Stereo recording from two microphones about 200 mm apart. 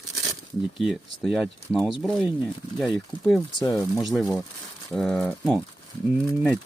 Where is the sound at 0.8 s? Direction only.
Centre (ahead or behind).